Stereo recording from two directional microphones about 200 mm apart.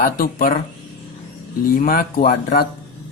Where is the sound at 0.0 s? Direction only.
45° left (ahead or behind).